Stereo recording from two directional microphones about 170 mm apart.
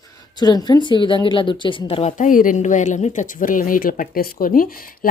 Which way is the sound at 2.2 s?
50° left (ahead or behind).